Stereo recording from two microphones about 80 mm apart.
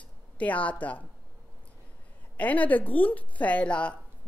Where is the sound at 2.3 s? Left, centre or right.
Centre.